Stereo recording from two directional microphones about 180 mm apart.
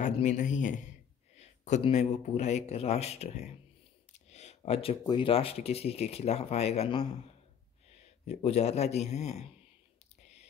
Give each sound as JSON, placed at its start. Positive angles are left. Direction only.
{"t": 0.0, "sound": "a man's voice", "side_deg": 40}
{"t": 4.1, "sound": "a sound", "side_deg": 40}
{"t": 5.0, "sound": "speech", "side_deg": 25}